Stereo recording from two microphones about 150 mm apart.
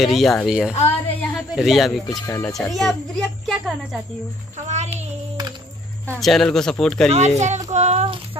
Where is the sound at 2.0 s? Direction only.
20° left (ahead or behind).